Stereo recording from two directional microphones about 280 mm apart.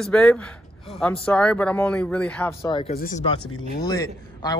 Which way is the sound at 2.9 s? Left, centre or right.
Left.